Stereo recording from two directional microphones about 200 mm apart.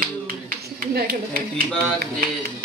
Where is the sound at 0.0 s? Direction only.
45° right (ahead or behind).